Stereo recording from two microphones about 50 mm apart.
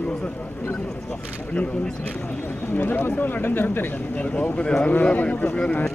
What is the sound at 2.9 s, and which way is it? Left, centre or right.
Speech, left.